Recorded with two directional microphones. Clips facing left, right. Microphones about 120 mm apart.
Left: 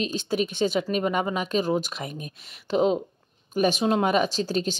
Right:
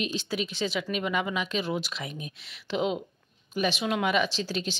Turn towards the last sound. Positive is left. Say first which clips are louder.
# left 5 dB
turn(degrees=45)  # may be behind; listen again after turning